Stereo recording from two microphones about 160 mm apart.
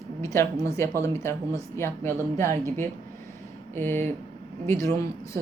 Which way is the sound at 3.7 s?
15° left (ahead or behind).